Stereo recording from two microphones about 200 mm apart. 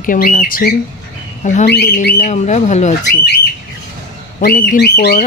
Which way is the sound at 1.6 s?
55° left (ahead or behind).